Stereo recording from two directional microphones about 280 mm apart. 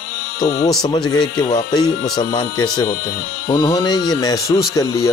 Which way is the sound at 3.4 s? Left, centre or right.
Centre.